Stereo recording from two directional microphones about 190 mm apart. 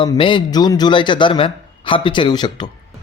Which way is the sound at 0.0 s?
25° left (ahead or behind).